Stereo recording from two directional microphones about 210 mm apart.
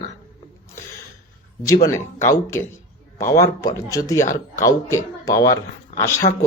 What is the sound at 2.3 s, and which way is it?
Speech, 15° left (ahead or behind).